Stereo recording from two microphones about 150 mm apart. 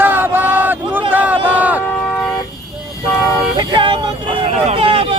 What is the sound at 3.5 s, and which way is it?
Vehicle, 30° right (ahead or behind).